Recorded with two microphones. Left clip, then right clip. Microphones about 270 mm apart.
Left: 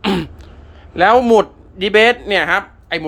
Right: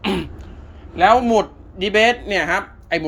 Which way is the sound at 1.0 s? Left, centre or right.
Centre.